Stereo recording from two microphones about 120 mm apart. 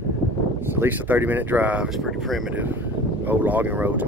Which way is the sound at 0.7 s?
15° right (ahead or behind).